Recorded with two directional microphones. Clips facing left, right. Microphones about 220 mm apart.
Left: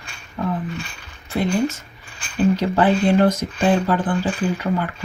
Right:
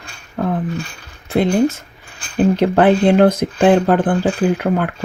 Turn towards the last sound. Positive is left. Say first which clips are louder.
# right 5 dB
turn(degrees=-55)  # may be behind; listen again after turning